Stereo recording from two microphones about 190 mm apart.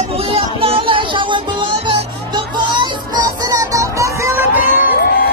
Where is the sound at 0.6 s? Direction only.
30° right (ahead or behind).